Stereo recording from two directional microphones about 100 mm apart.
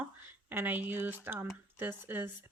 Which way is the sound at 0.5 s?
20° right (ahead or behind).